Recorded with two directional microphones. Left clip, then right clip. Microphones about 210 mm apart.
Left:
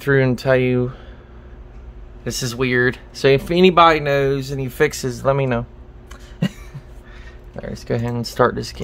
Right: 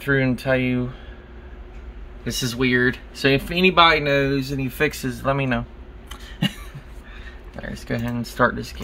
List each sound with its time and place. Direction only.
0.0 s speech: 60° left (ahead or behind)
2.2 s speech: 50° left (ahead or behind)
7.9 s speech: 60° left (ahead or behind)